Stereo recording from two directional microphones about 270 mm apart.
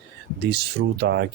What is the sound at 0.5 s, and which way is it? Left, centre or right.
Speech, right.